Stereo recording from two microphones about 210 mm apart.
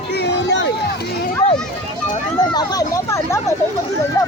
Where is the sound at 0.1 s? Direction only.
55° left (ahead or behind).